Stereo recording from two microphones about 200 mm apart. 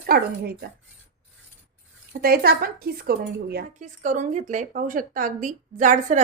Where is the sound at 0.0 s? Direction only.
50° right (ahead or behind).